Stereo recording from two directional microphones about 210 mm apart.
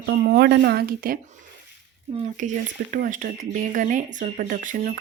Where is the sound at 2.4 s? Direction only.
35° right (ahead or behind).